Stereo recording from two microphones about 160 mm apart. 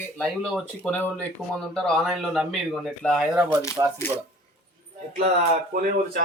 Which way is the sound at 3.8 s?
25° right (ahead or behind).